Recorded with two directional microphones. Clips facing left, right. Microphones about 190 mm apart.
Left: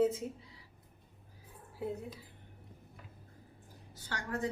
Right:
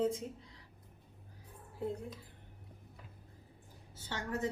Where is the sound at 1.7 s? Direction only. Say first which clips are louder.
Even; 5° left (ahead or behind).